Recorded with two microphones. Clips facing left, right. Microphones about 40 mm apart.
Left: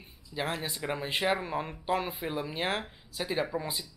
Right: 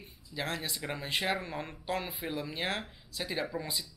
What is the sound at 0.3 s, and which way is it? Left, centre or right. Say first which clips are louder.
Speech: left 2 dB; centre.